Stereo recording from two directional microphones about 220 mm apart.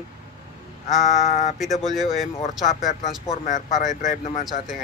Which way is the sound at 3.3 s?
35° left (ahead or behind).